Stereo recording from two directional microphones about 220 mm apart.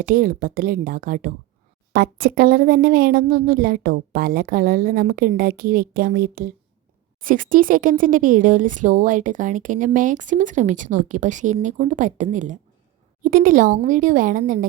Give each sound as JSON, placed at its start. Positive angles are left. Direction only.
{"t": 0.0, "sound": "speech", "side_deg": -40}